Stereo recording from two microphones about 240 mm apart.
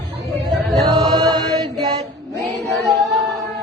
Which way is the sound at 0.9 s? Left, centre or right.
Centre.